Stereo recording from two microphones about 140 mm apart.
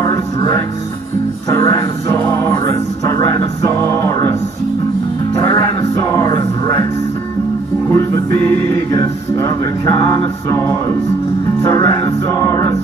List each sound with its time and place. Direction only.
0.0 s music: 20° left (ahead or behind)
1.5 s music: 20° left (ahead or behind)
5.4 s music: 25° left (ahead or behind)
7.9 s music: 15° left (ahead or behind)
11.7 s music: 20° left (ahead or behind)